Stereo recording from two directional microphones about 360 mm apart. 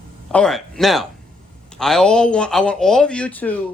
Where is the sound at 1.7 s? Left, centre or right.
Centre.